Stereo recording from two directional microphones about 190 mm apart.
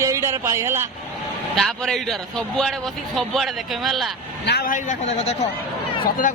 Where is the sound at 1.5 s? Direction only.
Centre (ahead or behind).